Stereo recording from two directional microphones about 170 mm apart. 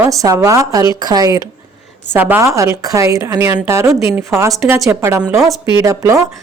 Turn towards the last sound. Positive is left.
turn(degrees=-20)  # may be behind; listen again after turning